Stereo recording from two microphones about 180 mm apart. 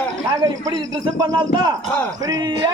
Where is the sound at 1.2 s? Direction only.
25° right (ahead or behind).